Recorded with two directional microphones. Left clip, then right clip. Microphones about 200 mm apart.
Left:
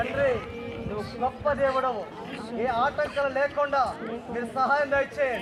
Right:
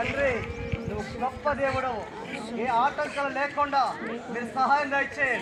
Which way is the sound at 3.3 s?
35° left (ahead or behind).